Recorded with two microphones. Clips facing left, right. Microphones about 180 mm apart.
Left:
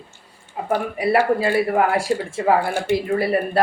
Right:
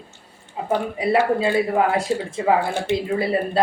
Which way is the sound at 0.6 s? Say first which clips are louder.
Left 1 dB; 20° right (ahead or behind).